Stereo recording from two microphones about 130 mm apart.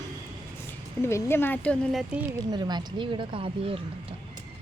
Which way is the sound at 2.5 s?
35° right (ahead or behind).